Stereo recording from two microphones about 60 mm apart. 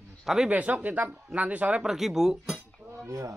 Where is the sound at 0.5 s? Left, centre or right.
Right.